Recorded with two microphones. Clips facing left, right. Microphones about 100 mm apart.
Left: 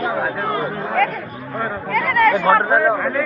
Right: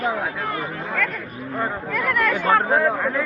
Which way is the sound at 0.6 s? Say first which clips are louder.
Left 7 dB; 20° left (ahead or behind).